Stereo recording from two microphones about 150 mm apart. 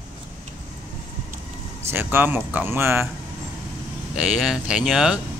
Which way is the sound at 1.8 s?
15° right (ahead or behind).